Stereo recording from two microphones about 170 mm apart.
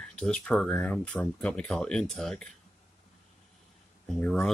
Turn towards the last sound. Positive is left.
turn(degrees=5)  # may be behind; listen again after turning